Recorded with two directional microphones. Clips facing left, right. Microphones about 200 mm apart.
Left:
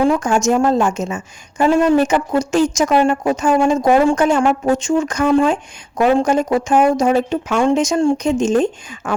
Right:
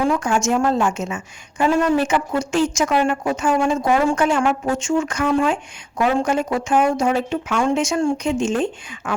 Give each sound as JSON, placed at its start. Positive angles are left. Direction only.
{"t": 0.0, "sound": "a woman's voice", "side_deg": 40}